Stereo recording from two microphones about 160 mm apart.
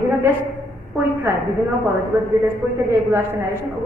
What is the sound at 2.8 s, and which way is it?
Speech, 15° right (ahead or behind).